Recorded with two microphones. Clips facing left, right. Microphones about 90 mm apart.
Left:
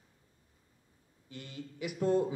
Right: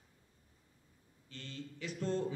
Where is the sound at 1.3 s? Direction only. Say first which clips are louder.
Left 2 dB; 15° left (ahead or behind).